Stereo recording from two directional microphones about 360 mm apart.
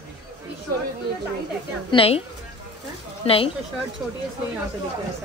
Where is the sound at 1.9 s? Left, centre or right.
Centre.